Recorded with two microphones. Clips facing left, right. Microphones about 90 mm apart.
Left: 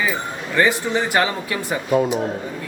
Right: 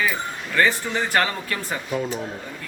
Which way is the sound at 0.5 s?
15° left (ahead or behind).